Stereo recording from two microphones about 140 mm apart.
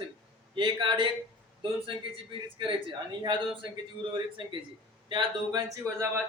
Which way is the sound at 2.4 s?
35° right (ahead or behind).